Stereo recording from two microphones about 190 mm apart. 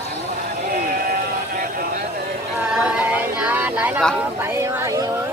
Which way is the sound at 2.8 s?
5° right (ahead or behind).